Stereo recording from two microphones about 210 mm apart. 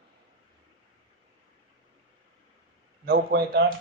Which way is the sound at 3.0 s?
50° right (ahead or behind).